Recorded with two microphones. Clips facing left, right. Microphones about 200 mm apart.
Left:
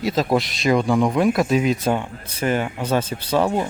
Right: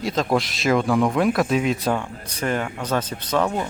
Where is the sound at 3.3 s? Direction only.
30° left (ahead or behind).